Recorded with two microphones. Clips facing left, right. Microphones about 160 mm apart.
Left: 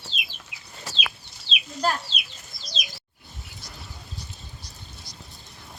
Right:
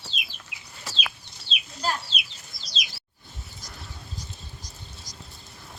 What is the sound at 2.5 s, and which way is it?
Bird, 25° left (ahead or behind).